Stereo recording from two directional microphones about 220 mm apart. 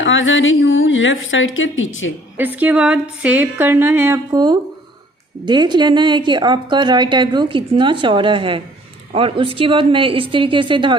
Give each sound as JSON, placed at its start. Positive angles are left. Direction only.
{"t": 0.0, "sound": "a woman's voice", "side_deg": 60}
{"t": 2.4, "sound": "a woman's voice", "side_deg": -5}